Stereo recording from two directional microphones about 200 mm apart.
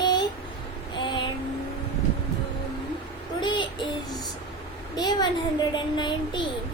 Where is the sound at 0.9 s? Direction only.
25° left (ahead or behind).